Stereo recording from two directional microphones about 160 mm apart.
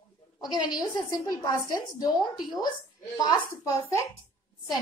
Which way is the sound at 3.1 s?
20° left (ahead or behind).